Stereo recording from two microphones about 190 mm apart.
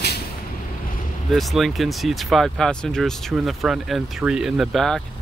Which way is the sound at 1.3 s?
Centre (ahead or behind).